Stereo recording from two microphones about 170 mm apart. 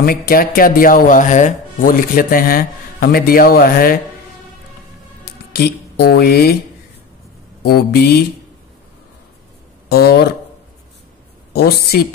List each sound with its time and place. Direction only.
0.3 s speech: 60° left (ahead or behind)
5.2 s speech: 70° left (ahead or behind)
7.6 s speech: 65° left (ahead or behind)
9.8 s speech: 70° left (ahead or behind)
11.5 s speech: 65° left (ahead or behind)